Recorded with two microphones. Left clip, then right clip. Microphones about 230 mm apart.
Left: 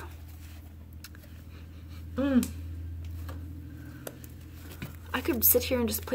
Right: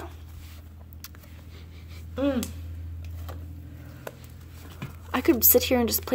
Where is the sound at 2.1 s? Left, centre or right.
Right.